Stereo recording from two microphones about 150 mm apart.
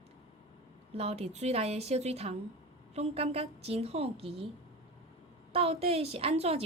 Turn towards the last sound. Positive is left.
turn(degrees=-45)  # may be behind; listen again after turning